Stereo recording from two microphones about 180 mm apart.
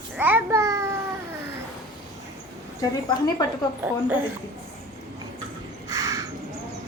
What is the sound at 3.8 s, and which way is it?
Speech, 10° right (ahead or behind).